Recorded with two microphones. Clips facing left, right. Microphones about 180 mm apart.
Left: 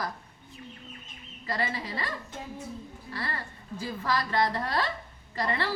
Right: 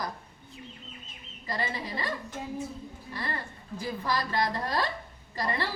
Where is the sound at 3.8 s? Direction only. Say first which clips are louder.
Left 1 dB; 15° right (ahead or behind).